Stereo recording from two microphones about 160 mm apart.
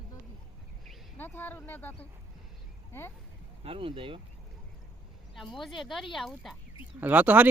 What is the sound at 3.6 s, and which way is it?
Speech, 35° right (ahead or behind).